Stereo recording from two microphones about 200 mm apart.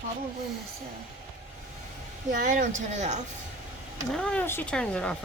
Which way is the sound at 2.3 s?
40° right (ahead or behind).